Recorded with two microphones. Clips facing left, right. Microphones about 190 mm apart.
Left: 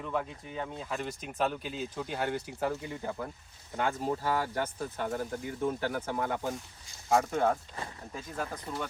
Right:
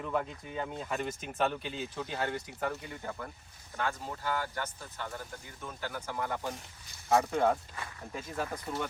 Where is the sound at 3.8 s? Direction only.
20° left (ahead or behind).